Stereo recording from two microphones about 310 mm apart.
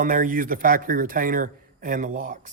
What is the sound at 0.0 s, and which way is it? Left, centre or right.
Speech, right.